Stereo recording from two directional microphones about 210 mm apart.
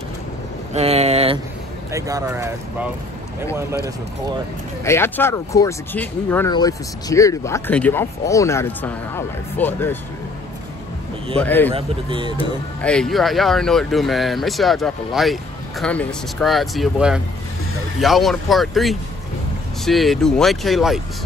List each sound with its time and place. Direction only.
0.7 s a sound: 30° right (ahead or behind)
1.9 s speech: 15° right (ahead or behind)
4.8 s speech: 10° left (ahead or behind)
11.3 s speech: 10° left (ahead or behind)
11.7 s speech: 25° right (ahead or behind)
12.8 s speech: 5° left (ahead or behind)